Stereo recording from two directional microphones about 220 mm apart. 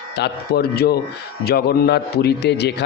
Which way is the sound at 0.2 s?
45° left (ahead or behind).